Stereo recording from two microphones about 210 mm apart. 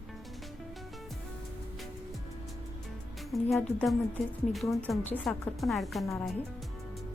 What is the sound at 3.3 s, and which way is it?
A woman's voice, 5° left (ahead or behind).